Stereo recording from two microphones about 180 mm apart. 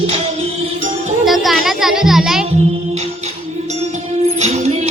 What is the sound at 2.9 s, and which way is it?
Music, 40° right (ahead or behind).